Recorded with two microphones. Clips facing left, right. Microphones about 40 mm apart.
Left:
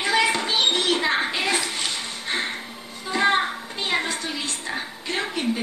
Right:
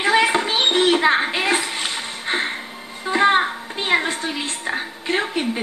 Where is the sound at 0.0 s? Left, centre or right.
Right.